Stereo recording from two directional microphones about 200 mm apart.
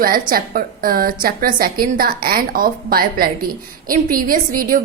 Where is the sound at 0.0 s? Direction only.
45° right (ahead or behind).